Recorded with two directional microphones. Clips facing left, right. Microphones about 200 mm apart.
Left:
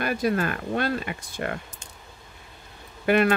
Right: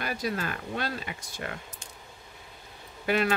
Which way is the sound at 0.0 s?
55° left (ahead or behind).